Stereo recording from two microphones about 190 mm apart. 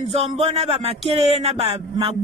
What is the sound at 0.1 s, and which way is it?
Speech, 35° right (ahead or behind).